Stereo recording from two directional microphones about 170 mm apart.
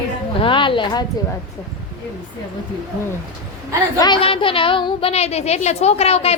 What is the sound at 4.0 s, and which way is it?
A woman's voice, 30° left (ahead or behind).